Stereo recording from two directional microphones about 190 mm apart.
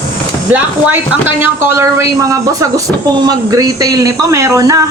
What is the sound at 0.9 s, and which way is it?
Speech, 10° right (ahead or behind).